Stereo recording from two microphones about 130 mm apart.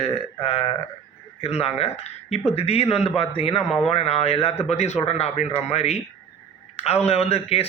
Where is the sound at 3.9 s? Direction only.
50° left (ahead or behind).